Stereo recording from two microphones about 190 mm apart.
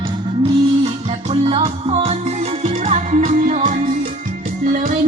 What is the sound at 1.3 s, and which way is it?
Music, 30° right (ahead or behind).